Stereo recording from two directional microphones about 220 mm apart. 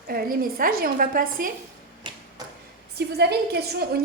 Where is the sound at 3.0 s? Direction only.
45° right (ahead or behind).